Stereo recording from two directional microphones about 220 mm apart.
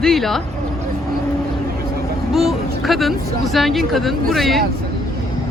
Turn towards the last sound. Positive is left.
turn(degrees=0)  # may be behind; listen again after turning